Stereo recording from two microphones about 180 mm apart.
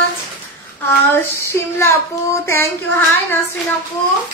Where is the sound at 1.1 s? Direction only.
15° left (ahead or behind).